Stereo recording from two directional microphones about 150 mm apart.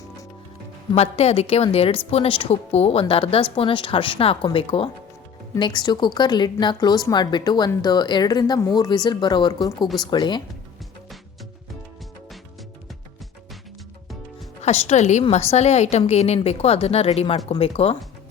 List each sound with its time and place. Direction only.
0.9 s a woman's voice: 45° left (ahead or behind)
14.6 s a woman's voice: 50° left (ahead or behind)